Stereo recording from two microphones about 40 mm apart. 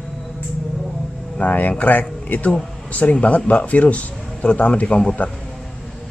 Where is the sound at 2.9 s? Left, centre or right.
Left.